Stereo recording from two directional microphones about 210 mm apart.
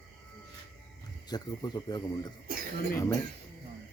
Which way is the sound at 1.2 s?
20° left (ahead or behind).